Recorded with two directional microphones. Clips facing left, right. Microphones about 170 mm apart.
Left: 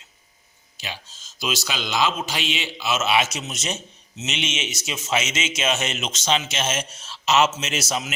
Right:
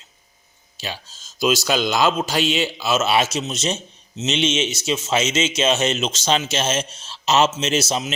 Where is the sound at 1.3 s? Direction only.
40° right (ahead or behind).